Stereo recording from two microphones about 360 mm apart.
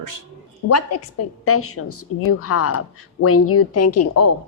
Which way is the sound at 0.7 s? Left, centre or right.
Left.